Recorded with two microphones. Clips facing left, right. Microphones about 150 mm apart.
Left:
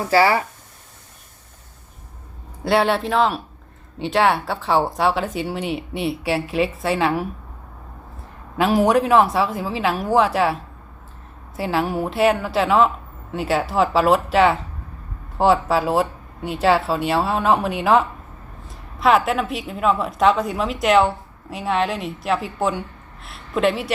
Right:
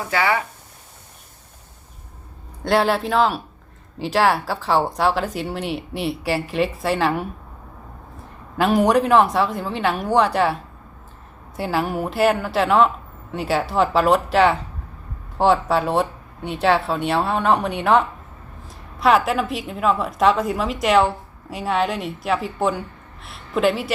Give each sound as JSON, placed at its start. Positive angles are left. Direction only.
{"t": 0.1, "sound": "speech", "side_deg": 35}
{"t": 2.6, "sound": "speech", "side_deg": 0}
{"t": 8.5, "sound": "a woman's voice", "side_deg": 0}